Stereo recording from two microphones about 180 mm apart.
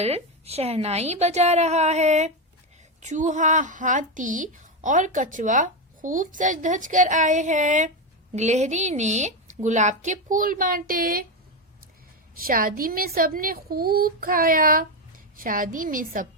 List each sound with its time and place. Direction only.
0.0 s a woman's voice: 35° right (ahead or behind); by 11.3 s 55° right (ahead or behind)
12.4 s a woman's voice: 55° right (ahead or behind)